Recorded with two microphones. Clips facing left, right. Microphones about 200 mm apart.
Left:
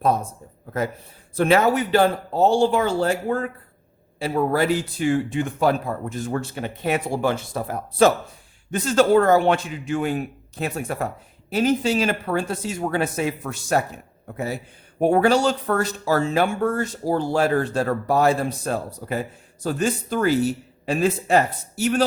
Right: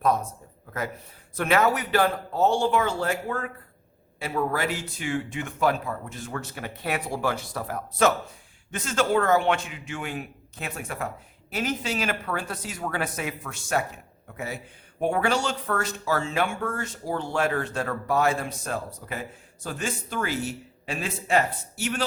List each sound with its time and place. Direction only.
0.0 s speech: 30° left (ahead or behind)
1.4 s speech: 30° left (ahead or behind)
6.4 s speech: 25° left (ahead or behind)